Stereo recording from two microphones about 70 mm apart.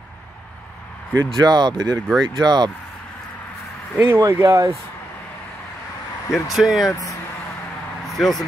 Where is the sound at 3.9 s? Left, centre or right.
Right.